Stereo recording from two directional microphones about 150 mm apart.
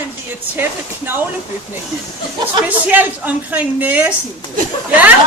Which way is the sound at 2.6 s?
10° right (ahead or behind).